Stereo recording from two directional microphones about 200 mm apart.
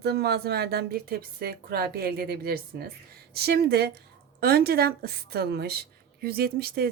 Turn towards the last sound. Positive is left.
turn(degrees=-50)  # may be behind; listen again after turning